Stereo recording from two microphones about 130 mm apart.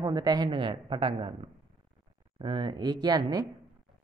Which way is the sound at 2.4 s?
40° right (ahead or behind).